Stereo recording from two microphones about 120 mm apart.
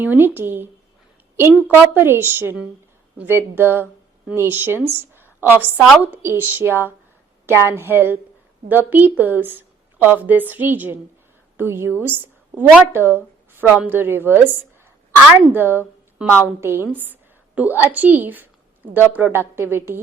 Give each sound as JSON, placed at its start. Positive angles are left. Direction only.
{"t": 0.0, "sound": "speech", "side_deg": -15}
{"t": 1.7, "sound": "a woman's voice", "side_deg": -15}